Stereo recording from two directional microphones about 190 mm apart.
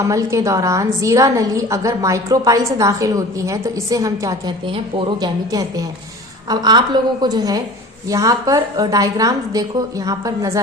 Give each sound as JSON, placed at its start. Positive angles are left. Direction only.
{"t": 0.0, "sound": "a woman's voice", "side_deg": -15}